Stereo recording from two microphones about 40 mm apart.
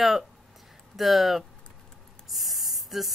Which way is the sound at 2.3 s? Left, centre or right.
Centre.